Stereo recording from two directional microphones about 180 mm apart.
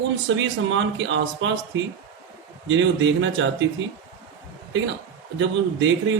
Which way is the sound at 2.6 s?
90° right.